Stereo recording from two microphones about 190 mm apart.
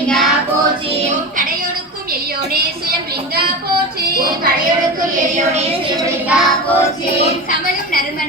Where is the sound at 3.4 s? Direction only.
55° right (ahead or behind).